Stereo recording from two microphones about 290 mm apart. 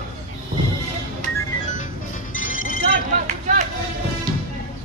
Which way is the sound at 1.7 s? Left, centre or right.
Left.